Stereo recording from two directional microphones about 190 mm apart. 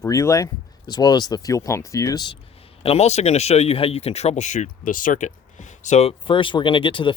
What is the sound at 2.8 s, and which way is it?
Speech, 35° left (ahead or behind).